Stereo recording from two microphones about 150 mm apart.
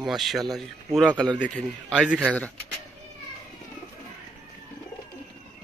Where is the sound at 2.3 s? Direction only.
10° left (ahead or behind).